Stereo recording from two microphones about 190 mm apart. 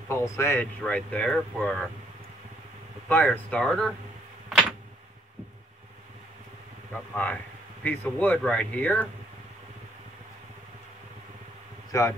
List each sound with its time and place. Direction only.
0.1 s speech: 15° left (ahead or behind)
3.1 s speech: 10° left (ahead or behind)
4.5 s a sound: centre (ahead or behind)
6.9 s speech: 10° left (ahead or behind)
11.9 s a man's voice: 15° left (ahead or behind)